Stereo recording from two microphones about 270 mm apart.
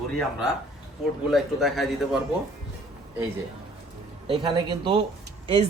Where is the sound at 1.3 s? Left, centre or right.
Centre.